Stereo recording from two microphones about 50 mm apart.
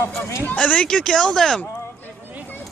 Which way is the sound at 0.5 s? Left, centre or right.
Left.